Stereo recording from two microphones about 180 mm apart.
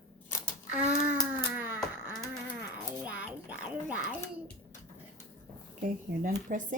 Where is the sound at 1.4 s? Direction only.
10° right (ahead or behind).